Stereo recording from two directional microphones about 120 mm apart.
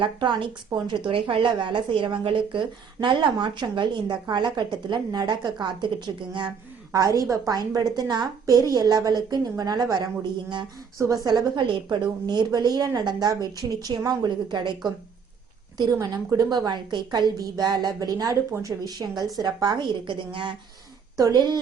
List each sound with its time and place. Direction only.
0.0 s a woman's voice: 40° right (ahead or behind)
6.9 s a woman's voice: 30° right (ahead or behind)
15.8 s a woman's voice: 35° right (ahead or behind)